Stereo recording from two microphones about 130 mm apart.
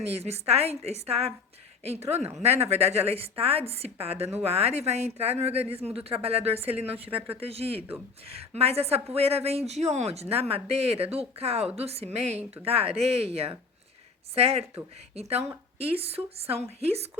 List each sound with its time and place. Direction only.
0.1 s a woman's voice: 55° right (ahead or behind)